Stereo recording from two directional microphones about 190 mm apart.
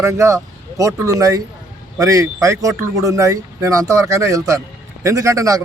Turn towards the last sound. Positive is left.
turn(degrees=-15)  # may be behind; listen again after turning